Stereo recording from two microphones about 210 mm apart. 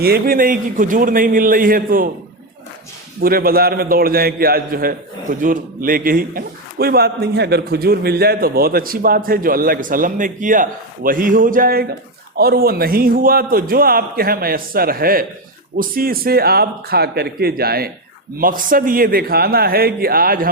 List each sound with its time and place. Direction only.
0.0 s a man's voice: 45° right (ahead or behind)
3.2 s a man's voice: 45° right (ahead or behind)